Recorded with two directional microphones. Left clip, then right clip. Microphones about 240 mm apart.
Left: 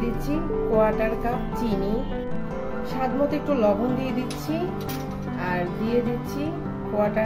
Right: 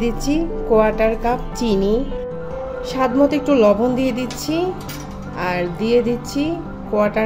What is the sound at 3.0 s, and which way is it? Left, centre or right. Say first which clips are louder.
Speech: right 8 dB; right.